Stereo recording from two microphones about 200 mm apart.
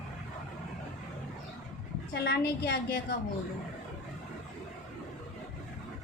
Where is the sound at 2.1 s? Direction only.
55° left (ahead or behind).